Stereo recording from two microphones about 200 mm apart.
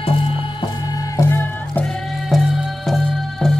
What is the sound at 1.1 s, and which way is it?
Music, 15° left (ahead or behind).